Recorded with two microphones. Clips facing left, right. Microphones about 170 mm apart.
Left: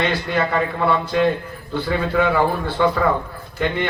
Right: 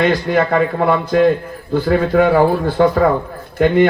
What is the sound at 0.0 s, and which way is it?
A man's voice, 45° right (ahead or behind).